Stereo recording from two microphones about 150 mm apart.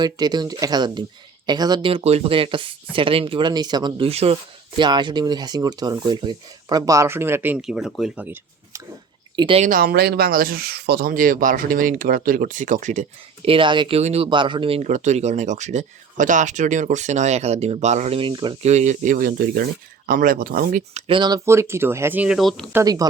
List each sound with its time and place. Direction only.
0.0 s speech: 30° right (ahead or behind)
4.8 s speech: 30° right (ahead or behind); by 8.4 s 10° right (ahead or behind)
9.3 s speech: 35° right (ahead or behind)
9.6 s speech: 75° right (ahead or behind); by 13.1 s 55° right (ahead or behind)
13.4 s speech: 35° right (ahead or behind)
14.3 s speech: 30° right (ahead or behind)
14.8 s speech: 55° right (ahead or behind)
18.2 s speech: 30° right (ahead or behind)
18.6 s speech: 50° right (ahead or behind); by 20.8 s 80° right
20.9 s speech: 35° right (ahead or behind); by 22.4 s 10° right (ahead or behind)
22.4 s speech: centre (ahead or behind)
22.7 s speech: 25° right (ahead or behind)